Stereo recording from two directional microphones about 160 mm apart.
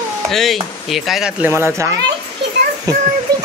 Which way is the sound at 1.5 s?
15° right (ahead or behind).